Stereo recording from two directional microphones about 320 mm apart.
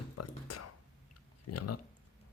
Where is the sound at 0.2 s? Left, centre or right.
Left.